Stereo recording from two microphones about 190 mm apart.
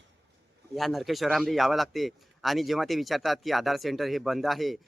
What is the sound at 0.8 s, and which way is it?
A man's voice, centre (ahead or behind).